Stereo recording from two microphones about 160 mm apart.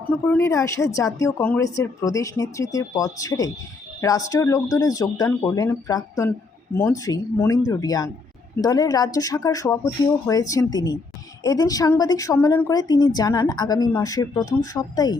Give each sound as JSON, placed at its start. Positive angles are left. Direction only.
{"t": 0.3, "sound": "speech", "side_deg": 15}